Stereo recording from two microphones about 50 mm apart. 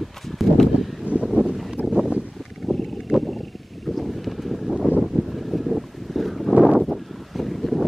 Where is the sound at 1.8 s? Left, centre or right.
Right.